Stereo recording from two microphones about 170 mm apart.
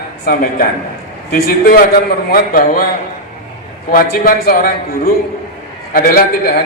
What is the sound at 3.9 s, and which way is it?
A man's voice, 65° left (ahead or behind).